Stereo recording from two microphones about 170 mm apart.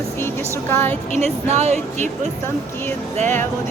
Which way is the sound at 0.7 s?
15° left (ahead or behind).